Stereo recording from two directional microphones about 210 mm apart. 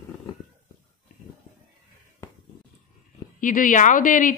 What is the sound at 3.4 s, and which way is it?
Speech, 40° left (ahead or behind).